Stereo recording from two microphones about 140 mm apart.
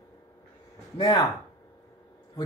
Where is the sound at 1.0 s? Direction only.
25° left (ahead or behind).